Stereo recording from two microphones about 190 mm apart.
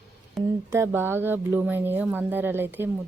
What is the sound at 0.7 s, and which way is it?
Speech, 10° right (ahead or behind).